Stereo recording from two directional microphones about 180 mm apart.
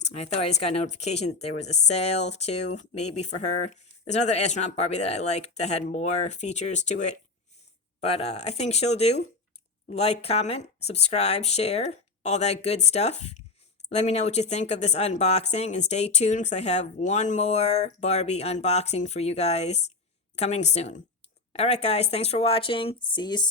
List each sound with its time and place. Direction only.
0.0 s a woman's voice: 35° left (ahead or behind)